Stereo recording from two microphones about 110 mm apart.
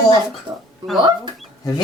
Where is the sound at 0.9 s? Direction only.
45° right (ahead or behind).